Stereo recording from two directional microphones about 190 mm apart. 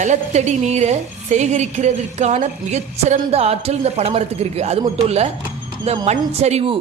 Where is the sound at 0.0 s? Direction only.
40° right (ahead or behind).